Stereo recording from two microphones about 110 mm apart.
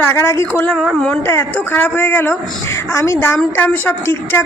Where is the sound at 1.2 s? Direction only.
20° left (ahead or behind).